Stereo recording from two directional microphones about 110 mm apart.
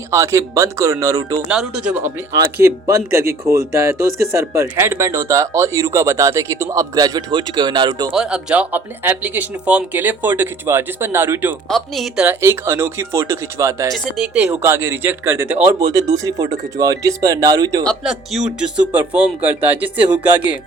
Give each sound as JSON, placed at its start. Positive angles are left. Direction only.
{"t": 0.1, "sound": "speech", "side_deg": -30}
{"t": 1.5, "sound": "speech", "side_deg": -10}
{"t": 2.6, "sound": "speech", "side_deg": -30}
{"t": 8.1, "sound": "speech", "side_deg": -5}
{"t": 11.7, "sound": "speech", "side_deg": 0}
{"t": 12.2, "sound": "speech", "side_deg": -20}
{"t": 14.3, "sound": "speech", "side_deg": -15}
{"t": 15.8, "sound": "speech", "side_deg": -35}
{"t": 18.0, "sound": "speech", "side_deg": -5}
{"t": 18.6, "sound": "speech", "side_deg": -15}